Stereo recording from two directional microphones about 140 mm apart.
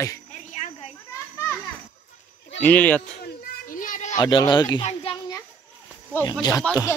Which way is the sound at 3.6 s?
70° left (ahead or behind).